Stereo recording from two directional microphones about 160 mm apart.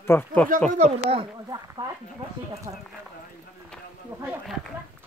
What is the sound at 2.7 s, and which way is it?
Speech, 30° right (ahead or behind).